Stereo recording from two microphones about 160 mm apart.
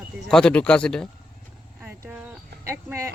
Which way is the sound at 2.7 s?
20° right (ahead or behind).